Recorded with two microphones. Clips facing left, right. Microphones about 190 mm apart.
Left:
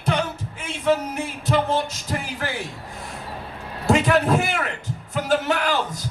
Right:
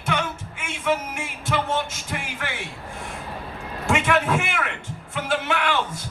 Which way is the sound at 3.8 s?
35° left (ahead or behind).